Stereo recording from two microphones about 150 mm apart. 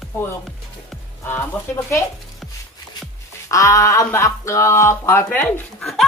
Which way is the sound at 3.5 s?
20° left (ahead or behind).